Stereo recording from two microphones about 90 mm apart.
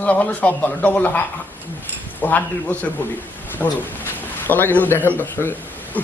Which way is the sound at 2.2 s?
20° left (ahead or behind).